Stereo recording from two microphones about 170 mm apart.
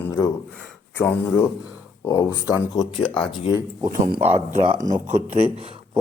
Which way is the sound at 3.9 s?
50° right (ahead or behind).